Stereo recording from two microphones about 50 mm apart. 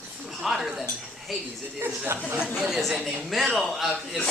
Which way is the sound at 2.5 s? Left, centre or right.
Centre.